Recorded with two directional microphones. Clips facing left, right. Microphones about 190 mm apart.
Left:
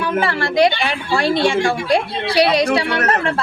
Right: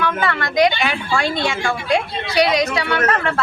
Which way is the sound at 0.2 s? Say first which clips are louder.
Left 3 dB; 30° left (ahead or behind).